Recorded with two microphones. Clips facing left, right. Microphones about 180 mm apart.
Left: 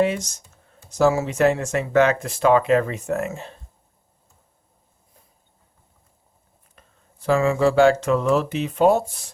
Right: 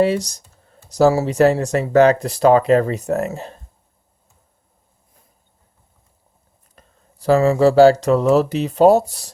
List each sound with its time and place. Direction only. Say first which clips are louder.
0.0 s speech: right 4 dB; 35° right (ahead or behind)
6.7 s speech: right 4 dB; 35° right (ahead or behind)